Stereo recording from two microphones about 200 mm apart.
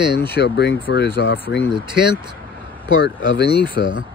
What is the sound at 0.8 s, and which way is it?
Speech, 70° left (ahead or behind).